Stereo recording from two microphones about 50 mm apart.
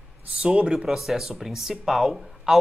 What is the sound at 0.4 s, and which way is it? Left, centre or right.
Speech, centre.